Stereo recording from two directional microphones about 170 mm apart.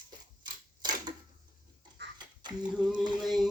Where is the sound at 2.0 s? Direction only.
80° right.